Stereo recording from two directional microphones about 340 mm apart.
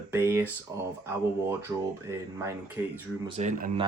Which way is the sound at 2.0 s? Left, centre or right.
Centre.